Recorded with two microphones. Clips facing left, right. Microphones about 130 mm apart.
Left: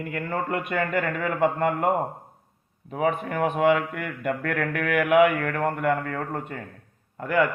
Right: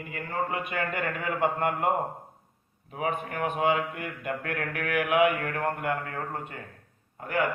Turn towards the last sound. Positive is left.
turn(degrees=80)